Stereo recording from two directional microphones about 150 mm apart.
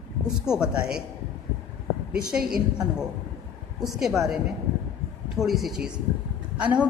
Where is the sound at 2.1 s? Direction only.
5° right (ahead or behind).